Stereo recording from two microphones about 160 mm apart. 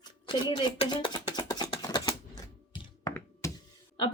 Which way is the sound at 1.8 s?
25° left (ahead or behind).